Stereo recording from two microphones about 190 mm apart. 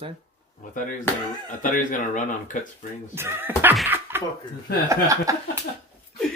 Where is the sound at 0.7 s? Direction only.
45° left (ahead or behind).